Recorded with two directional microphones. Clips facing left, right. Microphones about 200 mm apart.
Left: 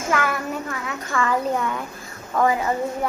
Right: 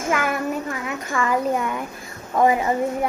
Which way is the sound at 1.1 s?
15° right (ahead or behind).